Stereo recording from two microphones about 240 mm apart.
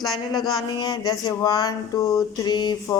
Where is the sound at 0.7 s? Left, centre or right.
Centre.